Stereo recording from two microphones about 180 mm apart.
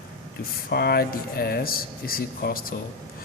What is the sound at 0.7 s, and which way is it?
Speech, 60° left (ahead or behind).